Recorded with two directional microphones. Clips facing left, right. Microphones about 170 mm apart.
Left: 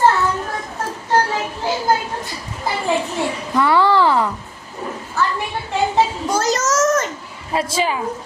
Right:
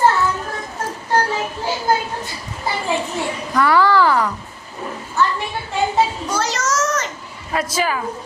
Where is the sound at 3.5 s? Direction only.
25° left (ahead or behind).